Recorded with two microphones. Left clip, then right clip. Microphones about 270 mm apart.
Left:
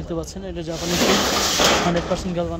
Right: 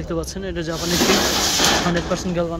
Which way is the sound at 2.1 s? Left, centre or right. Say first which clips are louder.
Right 2 dB; centre.